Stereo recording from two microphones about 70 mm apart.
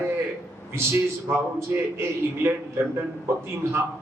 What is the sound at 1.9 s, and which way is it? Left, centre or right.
A man's voice, right.